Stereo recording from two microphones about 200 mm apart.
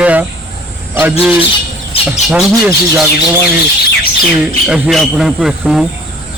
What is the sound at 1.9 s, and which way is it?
Bird, 30° left (ahead or behind).